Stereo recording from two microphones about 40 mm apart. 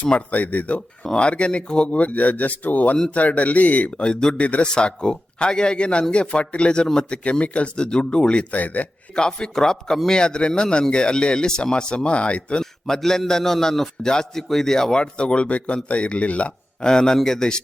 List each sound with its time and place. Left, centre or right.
0.3 s speech: left
1.1 s a man's voice: left
4.4 s speech: left
4.6 s a man's voice: left
7.3 s a man's voice: left
8.5 s speech: left
9.1 s a man's voice: centre
12.9 s a man's voice: centre; by 16.5 s left
16.8 s a man's voice: centre